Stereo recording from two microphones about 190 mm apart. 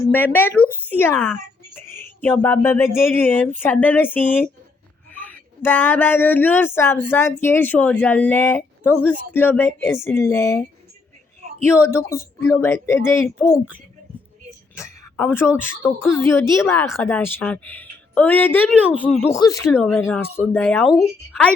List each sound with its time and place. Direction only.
0.1 s speech: 10° left (ahead or behind)
11.8 s speech: 15° left (ahead or behind)
14.8 s speech: 10° left (ahead or behind)
19.8 s speech: 5° left (ahead or behind)